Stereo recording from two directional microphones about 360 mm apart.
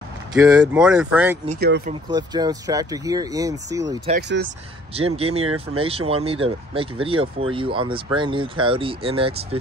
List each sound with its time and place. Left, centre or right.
0.4 s speech: centre
1.5 s speech: right
2.0 s speech: centre
4.1 s speech: right
5.4 s speech: right
5.8 s speech: centre